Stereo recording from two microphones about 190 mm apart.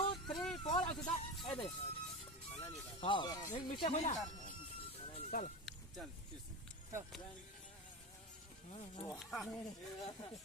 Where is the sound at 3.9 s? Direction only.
35° left (ahead or behind).